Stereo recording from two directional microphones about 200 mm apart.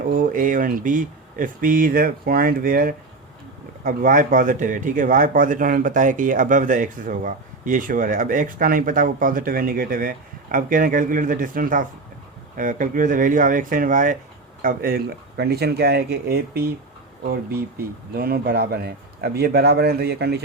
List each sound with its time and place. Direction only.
0.1 s speech: 40° right (ahead or behind)
18.1 s speech: 50° right (ahead or behind)